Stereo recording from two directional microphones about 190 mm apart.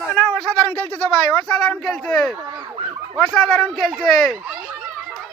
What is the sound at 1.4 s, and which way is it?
Speech, 5° left (ahead or behind).